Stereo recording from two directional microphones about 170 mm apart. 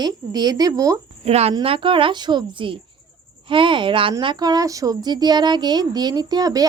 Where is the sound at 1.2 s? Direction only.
35° right (ahead or behind).